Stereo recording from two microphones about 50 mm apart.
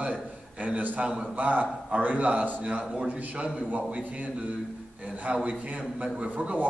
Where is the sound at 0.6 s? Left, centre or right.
Right.